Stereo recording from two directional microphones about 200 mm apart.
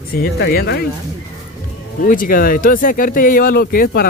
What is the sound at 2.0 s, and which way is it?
Speech, 45° left (ahead or behind).